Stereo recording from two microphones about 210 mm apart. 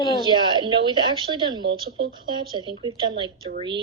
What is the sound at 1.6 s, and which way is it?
Speech, 50° right (ahead or behind).